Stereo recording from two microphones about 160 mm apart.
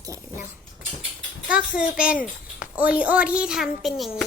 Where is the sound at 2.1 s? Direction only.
60° left (ahead or behind).